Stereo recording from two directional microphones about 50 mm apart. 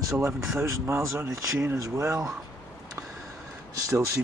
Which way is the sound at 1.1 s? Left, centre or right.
Right.